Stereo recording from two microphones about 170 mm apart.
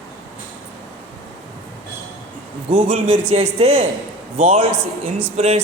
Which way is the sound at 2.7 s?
30° right (ahead or behind).